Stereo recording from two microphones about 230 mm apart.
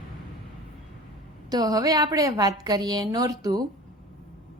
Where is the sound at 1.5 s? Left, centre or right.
Centre.